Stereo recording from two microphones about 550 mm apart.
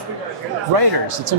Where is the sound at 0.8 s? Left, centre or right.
Right.